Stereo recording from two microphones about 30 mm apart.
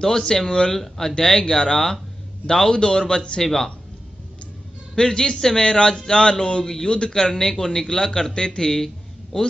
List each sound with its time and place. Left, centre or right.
0.0 s a man's voice: centre
0.5 s a man's voice: left
0.7 s speech: centre
1.5 s a man's voice: left
3.4 s speech: centre
4.9 s speech: left
6.6 s a man's voice: centre
6.9 s a man's voice: left
8.8 s a sound: centre